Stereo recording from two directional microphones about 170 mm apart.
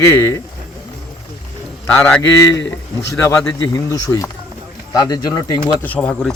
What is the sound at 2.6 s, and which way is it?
Speech, 90° left.